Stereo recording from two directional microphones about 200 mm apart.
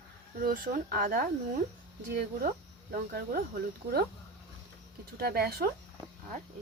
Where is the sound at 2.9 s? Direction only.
50° right (ahead or behind).